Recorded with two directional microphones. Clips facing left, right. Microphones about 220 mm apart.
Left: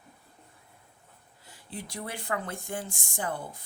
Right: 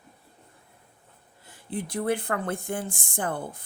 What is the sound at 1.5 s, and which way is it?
Speech, 55° right (ahead or behind).